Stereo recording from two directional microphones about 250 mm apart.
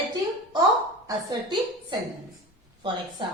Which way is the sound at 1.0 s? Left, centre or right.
Centre.